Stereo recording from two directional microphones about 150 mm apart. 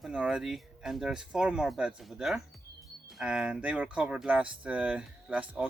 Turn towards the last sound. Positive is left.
turn(degrees=-10)  # may be behind; listen again after turning